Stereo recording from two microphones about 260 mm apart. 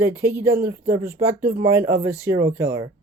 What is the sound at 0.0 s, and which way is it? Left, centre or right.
Speech, centre.